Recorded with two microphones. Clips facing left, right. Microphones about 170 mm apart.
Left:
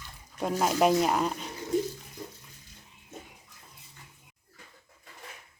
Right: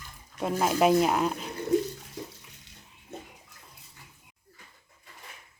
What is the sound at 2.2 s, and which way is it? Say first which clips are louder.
Bathtub: right 4 dB; 80° right.